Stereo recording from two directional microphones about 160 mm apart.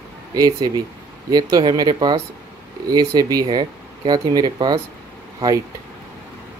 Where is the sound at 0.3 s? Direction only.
20° right (ahead or behind).